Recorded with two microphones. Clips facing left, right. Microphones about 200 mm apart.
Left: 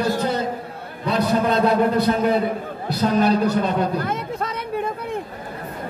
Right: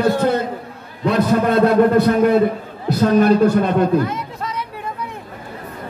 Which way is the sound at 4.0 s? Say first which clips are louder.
Right 2 dB; 55° left (ahead or behind).